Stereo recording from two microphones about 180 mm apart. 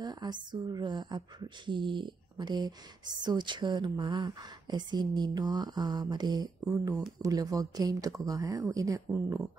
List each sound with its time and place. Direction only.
0.0 s speech: 25° right (ahead or behind)